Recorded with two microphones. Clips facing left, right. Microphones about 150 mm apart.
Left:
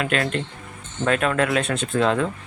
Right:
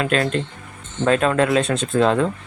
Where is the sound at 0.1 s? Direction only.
35° right (ahead or behind).